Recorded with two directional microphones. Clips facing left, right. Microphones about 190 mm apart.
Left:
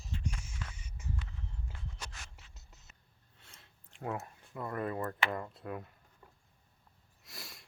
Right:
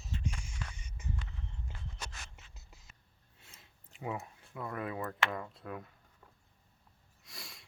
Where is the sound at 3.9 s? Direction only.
5° right (ahead or behind).